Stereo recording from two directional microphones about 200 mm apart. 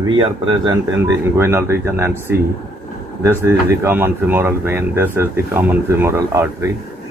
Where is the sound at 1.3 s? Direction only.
10° right (ahead or behind).